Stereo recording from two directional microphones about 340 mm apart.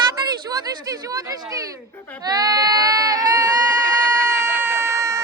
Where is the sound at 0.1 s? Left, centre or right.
Centre.